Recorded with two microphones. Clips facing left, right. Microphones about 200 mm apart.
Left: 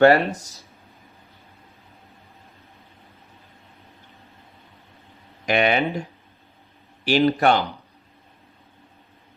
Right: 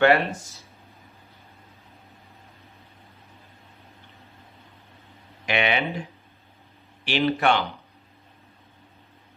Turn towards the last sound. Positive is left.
turn(degrees=40)  # may be behind; listen again after turning